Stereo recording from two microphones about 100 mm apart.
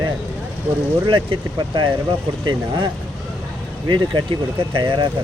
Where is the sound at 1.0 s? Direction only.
55° right (ahead or behind).